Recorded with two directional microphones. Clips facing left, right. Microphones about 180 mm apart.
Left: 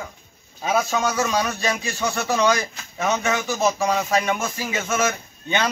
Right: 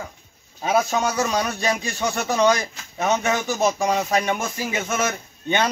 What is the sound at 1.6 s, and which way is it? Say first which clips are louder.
Speech: right 1 dB; 15° right (ahead or behind).